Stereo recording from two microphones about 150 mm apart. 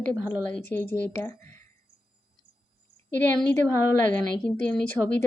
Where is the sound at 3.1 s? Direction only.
15° left (ahead or behind).